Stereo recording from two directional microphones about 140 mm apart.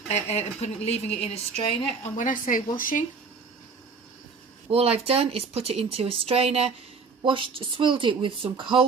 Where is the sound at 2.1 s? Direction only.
70° left (ahead or behind).